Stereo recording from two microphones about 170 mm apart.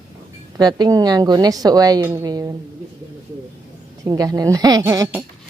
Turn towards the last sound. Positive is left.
turn(degrees=-20)  # may be behind; listen again after turning